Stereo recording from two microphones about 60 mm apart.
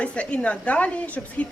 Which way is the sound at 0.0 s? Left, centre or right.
Left.